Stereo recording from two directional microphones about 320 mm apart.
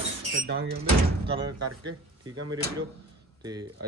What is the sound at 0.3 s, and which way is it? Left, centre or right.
Speech, right.